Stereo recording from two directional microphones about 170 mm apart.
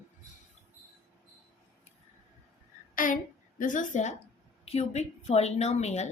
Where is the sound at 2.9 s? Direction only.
55° left (ahead or behind).